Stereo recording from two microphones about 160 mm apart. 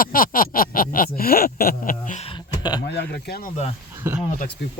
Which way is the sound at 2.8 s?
90° left.